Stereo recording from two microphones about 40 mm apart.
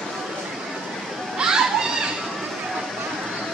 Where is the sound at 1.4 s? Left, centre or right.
Centre.